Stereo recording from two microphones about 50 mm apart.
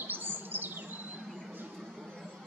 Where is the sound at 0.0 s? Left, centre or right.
Right.